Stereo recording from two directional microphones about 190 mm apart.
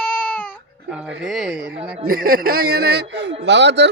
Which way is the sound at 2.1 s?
50° right (ahead or behind).